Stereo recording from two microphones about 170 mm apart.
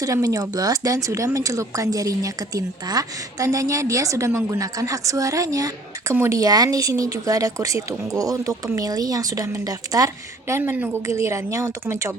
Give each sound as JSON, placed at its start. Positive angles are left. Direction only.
{"t": 0.0, "sound": "a woman's voice", "side_deg": -20}